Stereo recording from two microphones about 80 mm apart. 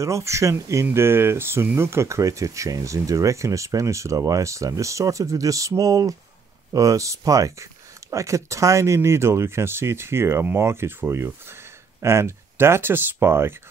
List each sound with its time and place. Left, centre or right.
0.0 s speech: right